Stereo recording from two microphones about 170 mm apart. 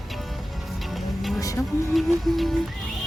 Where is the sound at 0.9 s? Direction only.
Centre (ahead or behind).